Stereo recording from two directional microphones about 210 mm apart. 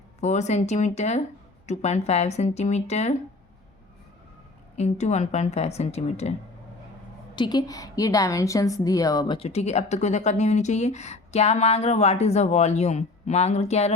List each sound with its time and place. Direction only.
0.2 s a woman's voice: 35° left (ahead or behind)
4.8 s a woman's voice: 35° left (ahead or behind)
7.3 s a woman's voice: 20° left (ahead or behind)